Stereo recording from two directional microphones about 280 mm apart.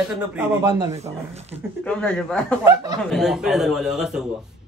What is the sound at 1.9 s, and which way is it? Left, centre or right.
Speech, centre.